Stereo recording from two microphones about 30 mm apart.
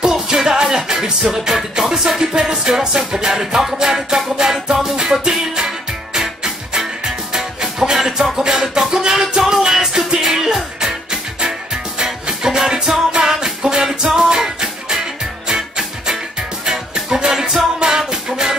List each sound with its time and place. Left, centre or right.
0.0 s music: centre